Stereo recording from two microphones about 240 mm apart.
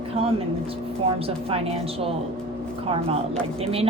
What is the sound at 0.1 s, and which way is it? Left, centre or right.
A woman's voice, right.